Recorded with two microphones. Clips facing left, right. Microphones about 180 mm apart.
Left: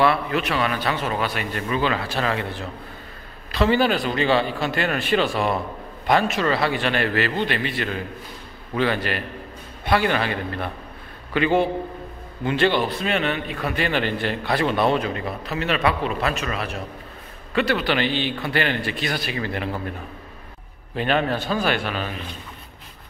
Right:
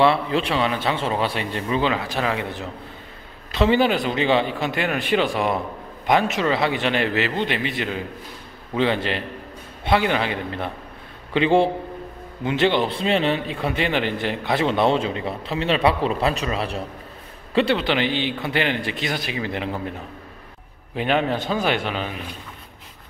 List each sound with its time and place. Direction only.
0.0 s a man's voice: 25° right (ahead or behind)
20.9 s a man's voice: 15° right (ahead or behind)